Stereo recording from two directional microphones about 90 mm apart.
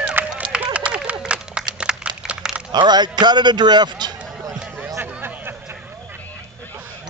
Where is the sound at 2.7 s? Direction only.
55° right (ahead or behind).